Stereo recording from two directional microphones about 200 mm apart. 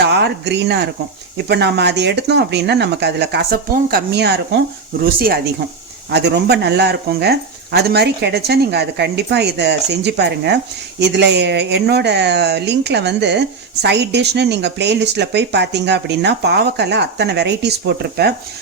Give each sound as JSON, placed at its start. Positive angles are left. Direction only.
{"t": 0.0, "sound": "speech", "side_deg": -60}
{"t": 6.1, "sound": "speech", "side_deg": -55}